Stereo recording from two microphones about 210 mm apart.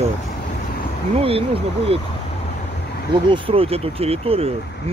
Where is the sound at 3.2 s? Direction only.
25° right (ahead or behind).